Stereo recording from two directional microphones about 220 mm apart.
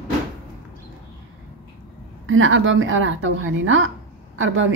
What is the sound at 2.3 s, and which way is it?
Speech, 60° right (ahead or behind).